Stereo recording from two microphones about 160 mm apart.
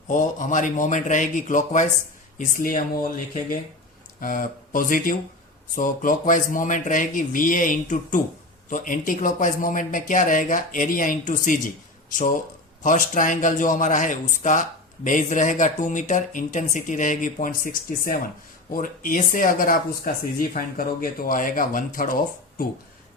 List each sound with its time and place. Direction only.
0.1 s a man's voice: 55° left (ahead or behind)
4.2 s speech: 60° left (ahead or behind)
12.8 s a man's voice: 55° left (ahead or behind)